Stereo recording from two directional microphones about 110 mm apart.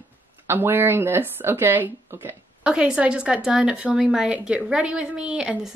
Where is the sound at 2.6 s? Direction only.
10° right (ahead or behind).